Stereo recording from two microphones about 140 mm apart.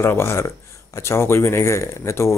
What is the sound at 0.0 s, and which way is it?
Speech, 20° left (ahead or behind).